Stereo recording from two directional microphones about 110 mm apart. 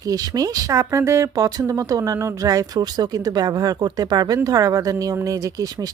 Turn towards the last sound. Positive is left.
turn(degrees=-35)  # may be behind; listen again after turning